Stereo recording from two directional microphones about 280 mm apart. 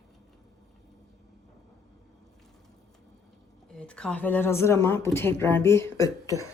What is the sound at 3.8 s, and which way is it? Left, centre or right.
Speech, centre.